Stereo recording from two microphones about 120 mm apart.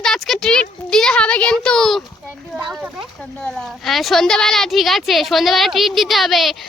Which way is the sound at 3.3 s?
5° left (ahead or behind).